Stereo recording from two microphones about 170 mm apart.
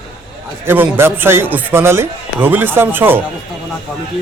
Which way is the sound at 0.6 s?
15° right (ahead or behind).